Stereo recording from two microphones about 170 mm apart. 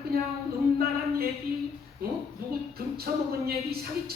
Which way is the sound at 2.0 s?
65° right (ahead or behind).